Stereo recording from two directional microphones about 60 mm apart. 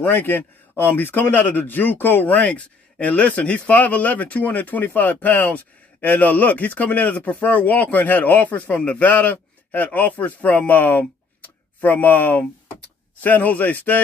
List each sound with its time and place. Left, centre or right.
0.1 s speech: left
2.3 s speech: left